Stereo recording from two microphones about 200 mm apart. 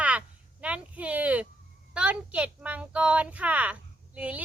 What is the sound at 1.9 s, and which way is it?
A child's voice, 5° right (ahead or behind).